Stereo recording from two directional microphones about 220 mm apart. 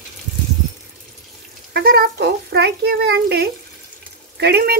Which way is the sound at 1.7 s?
45° right (ahead or behind).